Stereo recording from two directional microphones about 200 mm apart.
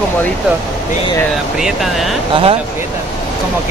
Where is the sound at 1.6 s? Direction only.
Centre (ahead or behind).